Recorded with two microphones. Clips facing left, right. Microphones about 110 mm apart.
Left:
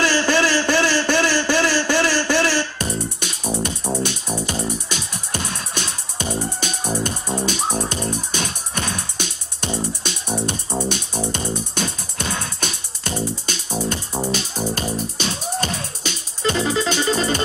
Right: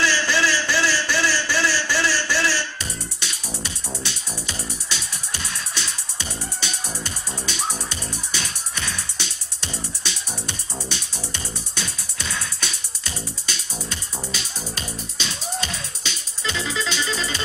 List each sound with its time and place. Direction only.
0.0 s a sound: 50° left (ahead or behind)
3.6 s music: 50° left (ahead or behind)
10.9 s music: 50° left (ahead or behind)